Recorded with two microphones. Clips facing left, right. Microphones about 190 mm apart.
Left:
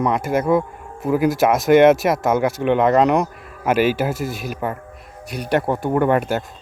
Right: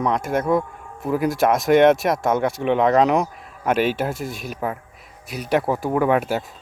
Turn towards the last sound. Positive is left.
turn(degrees=0)  # may be behind; listen again after turning